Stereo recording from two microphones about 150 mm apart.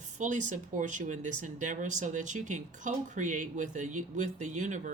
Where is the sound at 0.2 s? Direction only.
55° right (ahead or behind).